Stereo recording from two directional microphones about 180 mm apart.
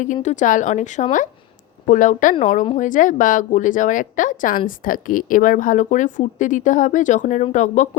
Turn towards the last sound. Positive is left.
turn(degrees=40)  # may be behind; listen again after turning